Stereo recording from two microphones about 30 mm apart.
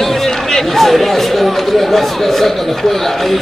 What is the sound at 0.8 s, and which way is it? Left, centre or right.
Speech, centre.